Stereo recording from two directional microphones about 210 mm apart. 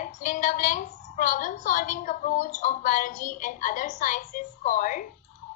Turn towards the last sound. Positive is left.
turn(degrees=40)  # may be behind; listen again after turning